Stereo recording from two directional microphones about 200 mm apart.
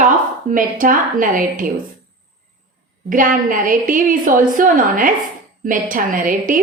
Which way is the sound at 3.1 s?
45° right (ahead or behind).